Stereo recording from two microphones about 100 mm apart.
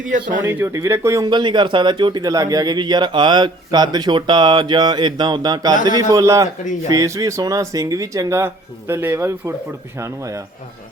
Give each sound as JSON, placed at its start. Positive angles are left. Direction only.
{"t": 0.6, "sound": "speech", "side_deg": -30}
{"t": 1.2, "sound": "speech", "side_deg": -50}